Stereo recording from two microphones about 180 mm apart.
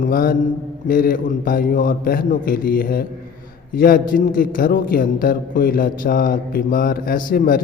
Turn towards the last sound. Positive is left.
turn(degrees=50)  # may be behind; listen again after turning